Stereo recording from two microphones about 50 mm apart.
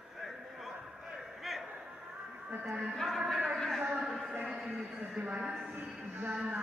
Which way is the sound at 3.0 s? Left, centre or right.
Centre.